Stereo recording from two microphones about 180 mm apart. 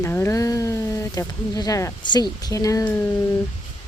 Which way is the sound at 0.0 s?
15° left (ahead or behind).